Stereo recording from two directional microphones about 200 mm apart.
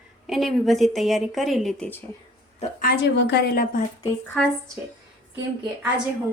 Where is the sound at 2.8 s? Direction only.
55° left (ahead or behind).